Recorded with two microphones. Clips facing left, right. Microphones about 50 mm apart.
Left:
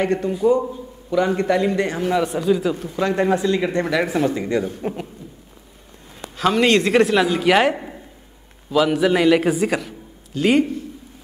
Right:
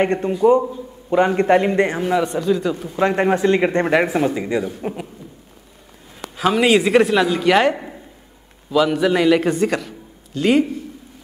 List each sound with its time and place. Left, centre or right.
0.0 s a man's voice: right
2.0 s speech: centre
2.2 s a man's voice: centre
3.0 s a man's voice: right
4.1 s speech: centre
6.3 s a man's voice: centre